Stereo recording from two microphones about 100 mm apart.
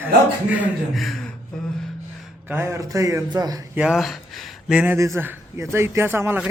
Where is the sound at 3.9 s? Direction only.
Centre (ahead or behind).